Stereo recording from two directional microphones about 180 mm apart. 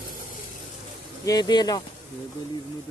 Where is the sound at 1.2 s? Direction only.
20° left (ahead or behind).